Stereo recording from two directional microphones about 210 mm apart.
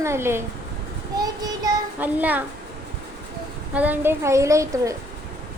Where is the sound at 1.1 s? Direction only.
20° right (ahead or behind).